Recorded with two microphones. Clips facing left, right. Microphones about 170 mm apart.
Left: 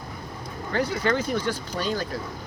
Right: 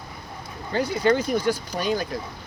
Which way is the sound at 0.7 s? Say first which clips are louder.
Right 3 dB; 15° right (ahead or behind).